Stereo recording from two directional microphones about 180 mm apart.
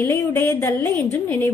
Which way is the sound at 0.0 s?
15° left (ahead or behind).